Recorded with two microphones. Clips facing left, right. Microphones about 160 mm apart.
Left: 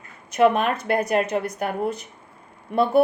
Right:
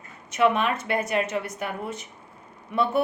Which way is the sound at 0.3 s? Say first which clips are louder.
Left 4 dB; 40° left (ahead or behind).